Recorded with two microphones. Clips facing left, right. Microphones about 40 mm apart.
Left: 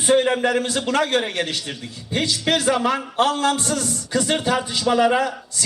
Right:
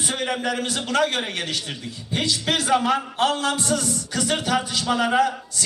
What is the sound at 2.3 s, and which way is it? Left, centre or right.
A man's voice, left.